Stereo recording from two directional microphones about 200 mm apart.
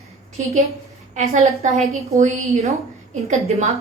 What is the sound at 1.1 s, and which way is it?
A woman's voice, 35° right (ahead or behind).